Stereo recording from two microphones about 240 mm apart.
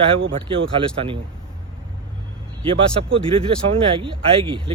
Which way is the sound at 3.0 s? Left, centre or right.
Right.